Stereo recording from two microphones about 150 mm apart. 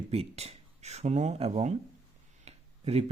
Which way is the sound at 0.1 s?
45° right (ahead or behind).